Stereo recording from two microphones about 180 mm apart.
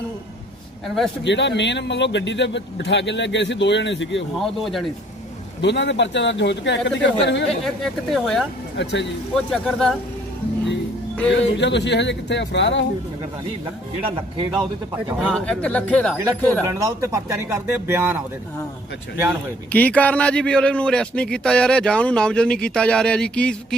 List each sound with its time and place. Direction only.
0.9 s speech: centre (ahead or behind)
1.2 s a man's voice: 80° left
4.4 s speech: centre (ahead or behind)
5.6 s a man's voice: 75° left (ahead or behind)
7.6 s speech: centre (ahead or behind)
8.8 s speech: 80° left
9.3 s speech: centre (ahead or behind)
11.3 s speech: 80° left
15.3 s speech: 5° left (ahead or behind)
16.6 s speech: 15° right (ahead or behind)
19.7 s speech: 10° left (ahead or behind)